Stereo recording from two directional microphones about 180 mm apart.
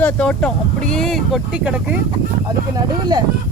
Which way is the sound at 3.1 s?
25° right (ahead or behind).